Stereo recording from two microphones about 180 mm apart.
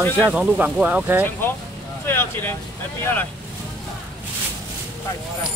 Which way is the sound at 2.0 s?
10° left (ahead or behind).